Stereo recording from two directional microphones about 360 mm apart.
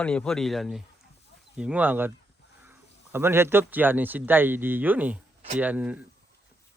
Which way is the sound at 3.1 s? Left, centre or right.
Centre.